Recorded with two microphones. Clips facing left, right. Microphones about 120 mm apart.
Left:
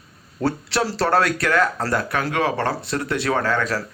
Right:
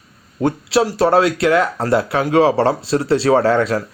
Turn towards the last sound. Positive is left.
turn(degrees=-25)  # may be behind; listen again after turning